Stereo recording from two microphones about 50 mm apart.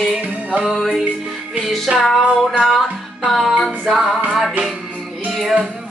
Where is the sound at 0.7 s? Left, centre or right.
Centre.